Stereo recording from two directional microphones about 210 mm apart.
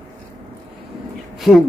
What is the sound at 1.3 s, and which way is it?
Speech, centre (ahead or behind).